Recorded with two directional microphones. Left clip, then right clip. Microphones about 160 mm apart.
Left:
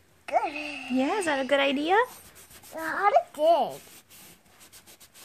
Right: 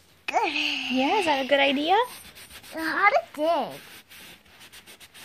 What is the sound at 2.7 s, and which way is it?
Speech, 20° right (ahead or behind).